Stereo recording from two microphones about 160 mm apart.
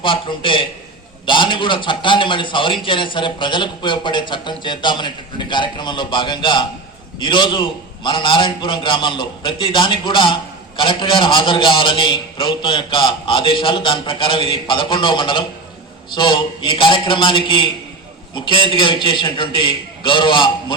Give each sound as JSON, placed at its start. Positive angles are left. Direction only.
{"t": 0.0, "sound": "a man's voice", "side_deg": 30}